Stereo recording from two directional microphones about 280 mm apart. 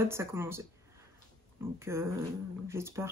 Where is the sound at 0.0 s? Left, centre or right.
Centre.